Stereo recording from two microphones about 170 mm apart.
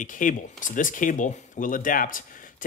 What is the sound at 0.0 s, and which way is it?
Speech, 50° left (ahead or behind).